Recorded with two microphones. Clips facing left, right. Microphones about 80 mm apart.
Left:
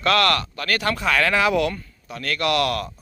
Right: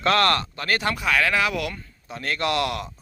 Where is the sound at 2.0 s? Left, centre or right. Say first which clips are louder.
Left 2 dB; right.